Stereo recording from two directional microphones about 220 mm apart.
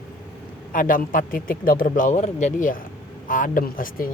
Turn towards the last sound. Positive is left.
turn(degrees=40)  # may be behind; listen again after turning